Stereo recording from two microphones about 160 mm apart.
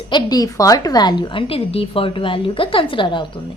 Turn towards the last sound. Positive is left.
turn(degrees=30)  # may be behind; listen again after turning